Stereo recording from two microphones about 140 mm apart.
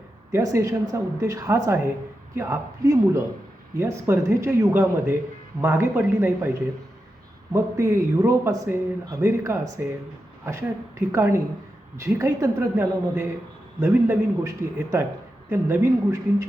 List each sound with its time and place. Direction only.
0.3 s a woman's voice: 20° right (ahead or behind)
7.5 s a woman's voice: 20° right (ahead or behind)